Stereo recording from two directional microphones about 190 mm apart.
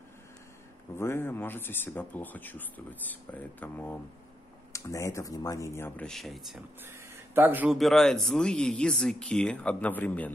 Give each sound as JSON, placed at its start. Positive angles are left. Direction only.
{"t": 0.9, "sound": "speech", "side_deg": 10}
{"t": 6.8, "sound": "a man's voice", "side_deg": -10}